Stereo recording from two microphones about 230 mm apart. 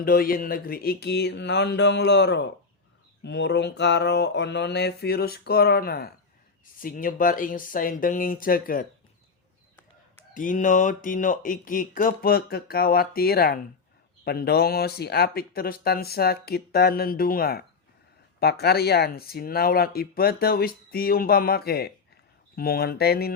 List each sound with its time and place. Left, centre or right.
0.0 s mantra: left
6.7 s speech: left
10.3 s speech: left
18.6 s speech: left
22.5 s mantra: left